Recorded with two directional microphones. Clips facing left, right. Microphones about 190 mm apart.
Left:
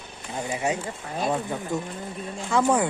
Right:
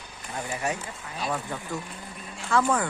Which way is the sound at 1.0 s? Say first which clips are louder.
Left 6 dB; 50° left (ahead or behind).